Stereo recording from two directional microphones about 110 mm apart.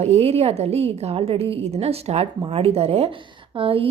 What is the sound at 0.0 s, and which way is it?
A woman's voice, 75° right (ahead or behind).